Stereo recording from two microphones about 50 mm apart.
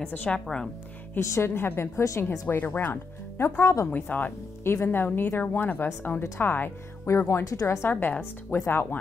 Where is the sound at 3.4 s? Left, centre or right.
Left.